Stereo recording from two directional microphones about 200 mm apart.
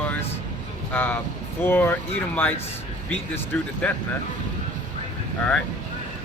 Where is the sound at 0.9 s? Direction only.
10° left (ahead or behind).